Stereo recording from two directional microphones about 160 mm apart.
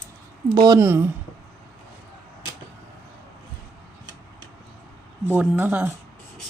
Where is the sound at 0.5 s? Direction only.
25° right (ahead or behind).